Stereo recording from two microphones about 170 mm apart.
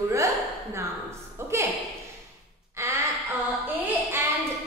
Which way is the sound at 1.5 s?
15° right (ahead or behind).